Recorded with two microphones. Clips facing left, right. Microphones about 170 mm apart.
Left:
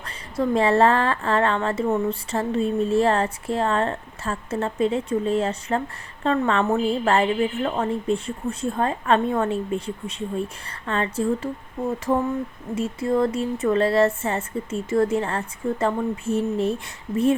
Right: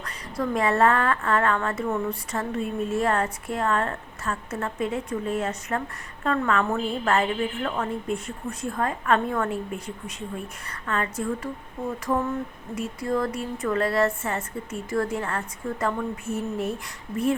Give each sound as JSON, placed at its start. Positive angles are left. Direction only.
{"t": 0.0, "sound": "speech", "side_deg": 25}
{"t": 12.7, "sound": "speech", "side_deg": 25}